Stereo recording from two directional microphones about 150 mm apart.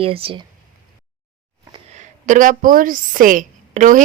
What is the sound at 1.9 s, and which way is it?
A woman's voice, 55° right (ahead or behind).